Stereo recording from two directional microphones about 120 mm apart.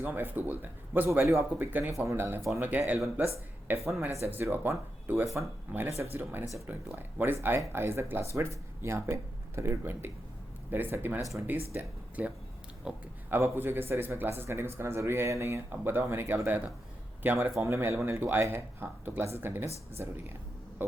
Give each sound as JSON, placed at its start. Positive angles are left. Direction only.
{"t": 0.0, "sound": "a man's voice", "side_deg": -15}
{"t": 13.3, "sound": "a man's voice", "side_deg": -20}